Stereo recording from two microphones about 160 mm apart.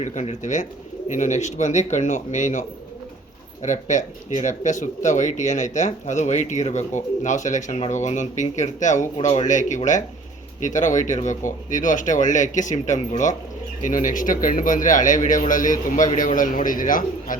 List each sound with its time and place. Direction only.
0.0 s a man's voice: 50° left (ahead or behind)